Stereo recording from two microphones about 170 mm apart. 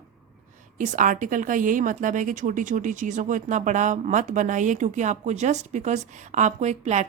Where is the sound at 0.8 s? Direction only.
50° right (ahead or behind).